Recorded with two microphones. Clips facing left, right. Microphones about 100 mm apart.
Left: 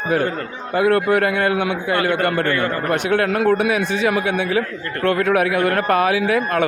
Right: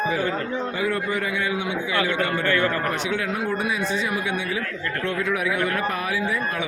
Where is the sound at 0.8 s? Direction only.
65° left (ahead or behind).